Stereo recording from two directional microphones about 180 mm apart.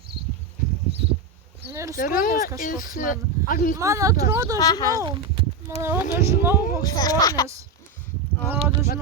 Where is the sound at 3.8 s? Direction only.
15° right (ahead or behind).